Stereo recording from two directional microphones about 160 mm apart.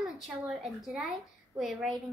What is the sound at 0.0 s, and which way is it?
A child's voice, centre (ahead or behind).